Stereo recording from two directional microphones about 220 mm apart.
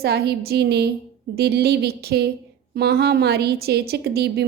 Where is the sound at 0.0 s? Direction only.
45° right (ahead or behind).